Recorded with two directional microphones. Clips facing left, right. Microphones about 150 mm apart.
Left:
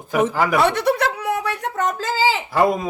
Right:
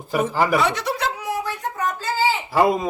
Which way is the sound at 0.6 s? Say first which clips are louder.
Left 5 dB; 60° left (ahead or behind).